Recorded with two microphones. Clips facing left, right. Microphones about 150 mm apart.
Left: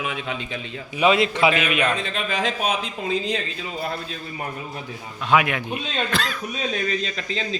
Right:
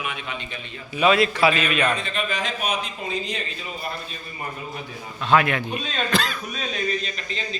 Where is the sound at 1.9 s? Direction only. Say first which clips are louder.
Left 2 dB; 90° left.